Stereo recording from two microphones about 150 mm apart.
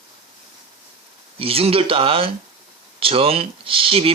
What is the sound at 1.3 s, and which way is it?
Speech, 40° right (ahead or behind).